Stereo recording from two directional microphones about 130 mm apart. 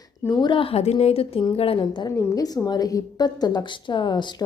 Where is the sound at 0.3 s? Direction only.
35° left (ahead or behind).